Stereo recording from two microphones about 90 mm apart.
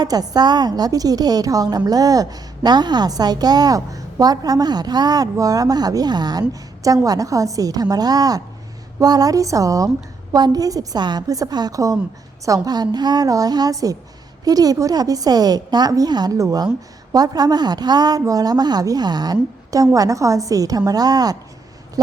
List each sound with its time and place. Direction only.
0.0 s a woman's voice: 50° right (ahead or behind)
6.5 s a woman's voice: 40° right (ahead or behind)